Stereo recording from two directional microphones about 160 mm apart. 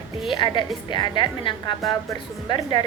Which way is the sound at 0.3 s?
30° left (ahead or behind).